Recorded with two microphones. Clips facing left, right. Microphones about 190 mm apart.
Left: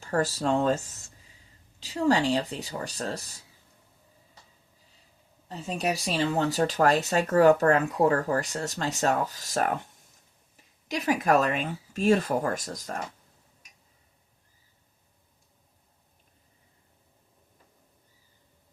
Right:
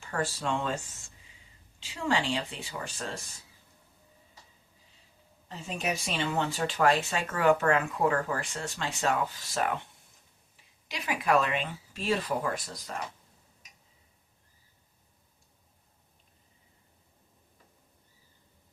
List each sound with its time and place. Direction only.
0.0 s speech: 40° left (ahead or behind)
5.5 s speech: 35° left (ahead or behind)